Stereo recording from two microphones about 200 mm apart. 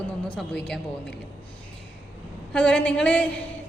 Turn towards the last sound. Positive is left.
turn(degrees=5)  # may be behind; listen again after turning